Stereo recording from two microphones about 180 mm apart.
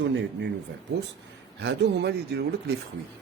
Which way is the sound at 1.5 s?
70° right (ahead or behind).